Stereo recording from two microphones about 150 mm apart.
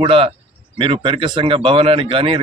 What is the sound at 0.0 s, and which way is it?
Speech, 35° right (ahead or behind).